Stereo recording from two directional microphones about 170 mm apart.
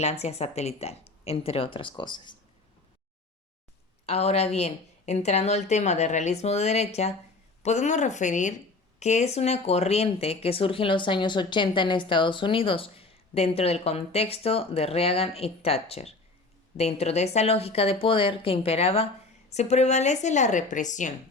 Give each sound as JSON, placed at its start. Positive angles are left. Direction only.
{"t": 0.0, "sound": "speech", "side_deg": 40}
{"t": 4.0, "sound": "a woman's voice", "side_deg": 40}